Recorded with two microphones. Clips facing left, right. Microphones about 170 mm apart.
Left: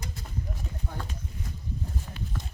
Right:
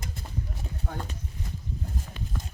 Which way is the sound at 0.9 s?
60° right (ahead or behind).